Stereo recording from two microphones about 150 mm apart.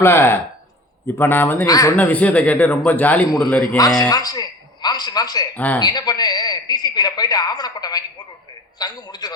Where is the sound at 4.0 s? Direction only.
25° left (ahead or behind).